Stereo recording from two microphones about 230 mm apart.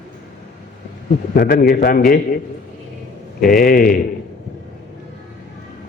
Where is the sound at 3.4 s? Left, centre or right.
Left.